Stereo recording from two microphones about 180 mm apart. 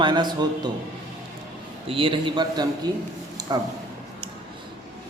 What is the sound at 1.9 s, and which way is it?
Speech, 30° right (ahead or behind).